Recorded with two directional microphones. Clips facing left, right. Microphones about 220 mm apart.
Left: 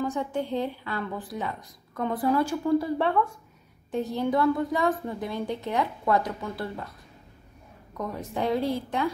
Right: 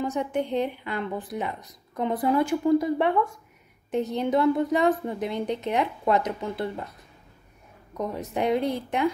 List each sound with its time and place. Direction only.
0.0 s speech: 20° right (ahead or behind)
8.0 s speech: 20° right (ahead or behind)